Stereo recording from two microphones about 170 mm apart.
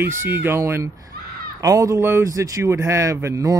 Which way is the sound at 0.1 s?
15° right (ahead or behind).